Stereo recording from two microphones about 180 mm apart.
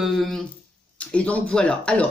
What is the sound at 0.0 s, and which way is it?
Speech, centre (ahead or behind).